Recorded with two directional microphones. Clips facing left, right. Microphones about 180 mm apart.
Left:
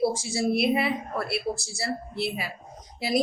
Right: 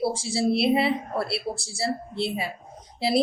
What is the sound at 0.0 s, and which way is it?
Speech, 30° right (ahead or behind).